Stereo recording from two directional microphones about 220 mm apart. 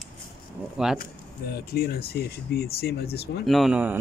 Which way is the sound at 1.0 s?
45° left (ahead or behind).